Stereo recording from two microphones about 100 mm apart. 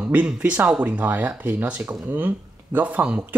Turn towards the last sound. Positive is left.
turn(degrees=-10)  # may be behind; listen again after turning